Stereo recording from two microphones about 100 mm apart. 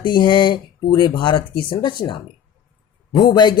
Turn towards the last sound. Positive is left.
turn(degrees=45)  # may be behind; listen again after turning